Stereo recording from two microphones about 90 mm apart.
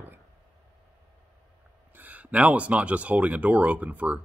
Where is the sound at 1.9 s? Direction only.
20° right (ahead or behind).